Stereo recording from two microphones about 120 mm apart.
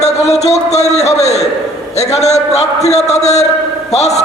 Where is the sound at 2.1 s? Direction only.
65° left (ahead or behind).